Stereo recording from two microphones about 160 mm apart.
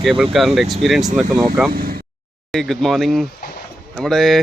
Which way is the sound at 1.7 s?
70° right (ahead or behind).